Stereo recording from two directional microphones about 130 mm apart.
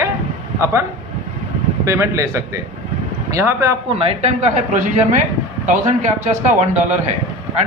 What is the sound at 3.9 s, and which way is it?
Speech, 50° right (ahead or behind).